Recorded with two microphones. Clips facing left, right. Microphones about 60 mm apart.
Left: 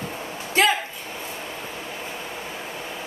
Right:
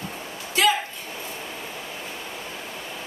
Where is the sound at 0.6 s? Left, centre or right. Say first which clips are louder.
Left 1 dB; left.